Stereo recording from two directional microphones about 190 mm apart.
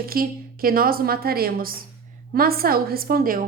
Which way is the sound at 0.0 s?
50° right (ahead or behind).